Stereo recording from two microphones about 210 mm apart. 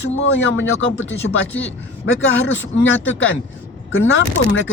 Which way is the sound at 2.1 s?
60° left (ahead or behind).